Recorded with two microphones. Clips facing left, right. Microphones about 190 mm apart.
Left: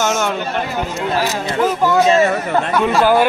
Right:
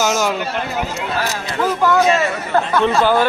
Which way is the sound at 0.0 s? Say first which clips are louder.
Even; 5° right (ahead or behind).